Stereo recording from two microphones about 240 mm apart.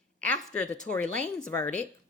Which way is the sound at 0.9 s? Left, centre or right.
Centre.